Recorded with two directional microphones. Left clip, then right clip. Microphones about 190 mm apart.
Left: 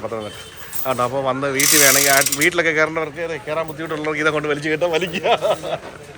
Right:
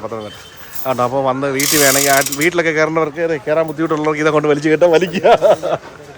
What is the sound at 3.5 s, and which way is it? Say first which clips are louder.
Speech: right 9 dB; 35° right (ahead or behind).